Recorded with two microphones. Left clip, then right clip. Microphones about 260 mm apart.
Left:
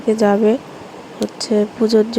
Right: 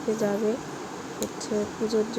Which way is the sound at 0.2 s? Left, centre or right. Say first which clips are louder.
Left 14 dB; left.